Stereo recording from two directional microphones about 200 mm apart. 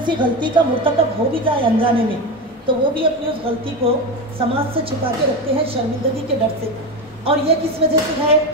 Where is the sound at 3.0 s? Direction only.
25° right (ahead or behind).